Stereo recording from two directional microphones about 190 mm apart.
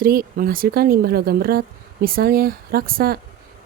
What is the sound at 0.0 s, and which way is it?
Speech, 50° right (ahead or behind).